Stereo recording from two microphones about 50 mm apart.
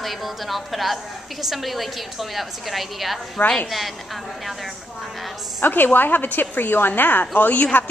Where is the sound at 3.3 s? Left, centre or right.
Left.